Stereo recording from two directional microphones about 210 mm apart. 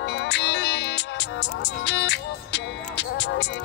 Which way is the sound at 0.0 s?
55° left (ahead or behind).